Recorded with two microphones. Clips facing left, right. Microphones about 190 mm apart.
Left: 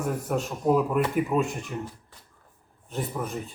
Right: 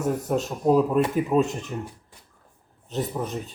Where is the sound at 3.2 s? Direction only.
20° right (ahead or behind).